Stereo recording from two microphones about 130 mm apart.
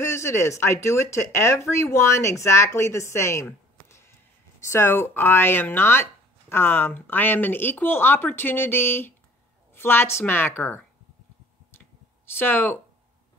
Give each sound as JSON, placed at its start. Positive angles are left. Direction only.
{"t": 0.0, "sound": "speech", "side_deg": 20}
{"t": 4.6, "sound": "speech", "side_deg": 20}
{"t": 12.4, "sound": "speech", "side_deg": 15}